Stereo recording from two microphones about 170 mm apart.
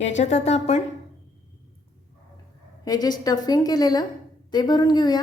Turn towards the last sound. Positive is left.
turn(degrees=25)  # may be behind; listen again after turning